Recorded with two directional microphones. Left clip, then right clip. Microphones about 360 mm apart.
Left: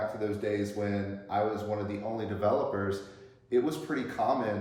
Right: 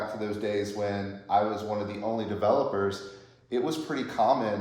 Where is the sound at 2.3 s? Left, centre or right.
Centre.